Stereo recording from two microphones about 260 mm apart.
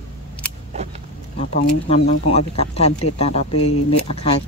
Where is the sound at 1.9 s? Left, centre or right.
Left.